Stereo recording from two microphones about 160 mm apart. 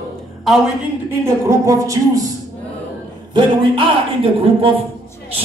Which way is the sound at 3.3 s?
30° right (ahead or behind).